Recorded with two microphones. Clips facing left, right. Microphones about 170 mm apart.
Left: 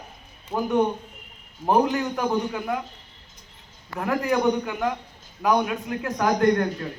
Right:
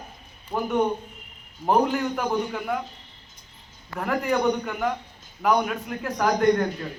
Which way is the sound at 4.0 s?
5° left (ahead or behind).